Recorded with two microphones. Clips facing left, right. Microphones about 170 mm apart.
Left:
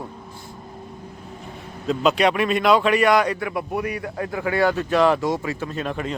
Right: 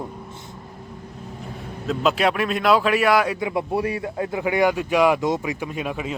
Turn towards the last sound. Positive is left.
turn(degrees=-5)  # may be behind; listen again after turning